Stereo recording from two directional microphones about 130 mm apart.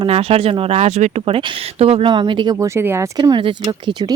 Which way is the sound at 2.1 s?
40° right (ahead or behind).